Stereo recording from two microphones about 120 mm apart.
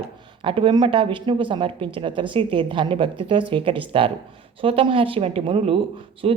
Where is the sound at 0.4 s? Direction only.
45° right (ahead or behind).